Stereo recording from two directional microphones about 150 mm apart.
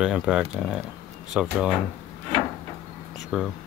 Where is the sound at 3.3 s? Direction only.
5° right (ahead or behind).